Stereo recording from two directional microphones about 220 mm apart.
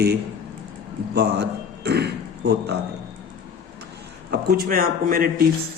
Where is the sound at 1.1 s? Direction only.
50° right (ahead or behind).